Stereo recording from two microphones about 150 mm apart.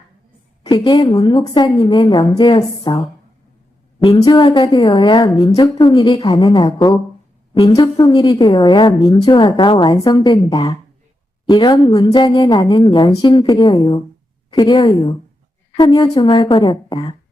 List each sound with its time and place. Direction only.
0.6 s a woman's voice: 30° left (ahead or behind)
4.0 s a woman's voice: 30° left (ahead or behind)
10.3 s a woman's voice: 40° left (ahead or behind)
11.4 s a woman's voice: 30° left (ahead or behind)